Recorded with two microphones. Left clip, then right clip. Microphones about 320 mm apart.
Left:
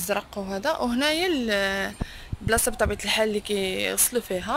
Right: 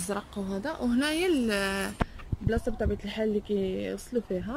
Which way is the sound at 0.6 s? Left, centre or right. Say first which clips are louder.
Left 6 dB; centre.